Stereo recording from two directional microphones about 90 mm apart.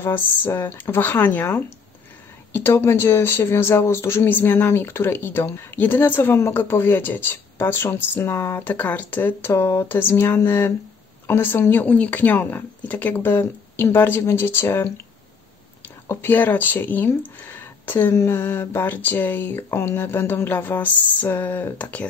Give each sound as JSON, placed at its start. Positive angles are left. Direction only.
{"t": 0.0, "sound": "speech", "side_deg": 25}
{"t": 16.1, "sound": "speech", "side_deg": 25}